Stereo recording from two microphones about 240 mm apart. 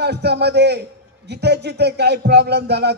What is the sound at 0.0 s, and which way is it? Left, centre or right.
Music, right.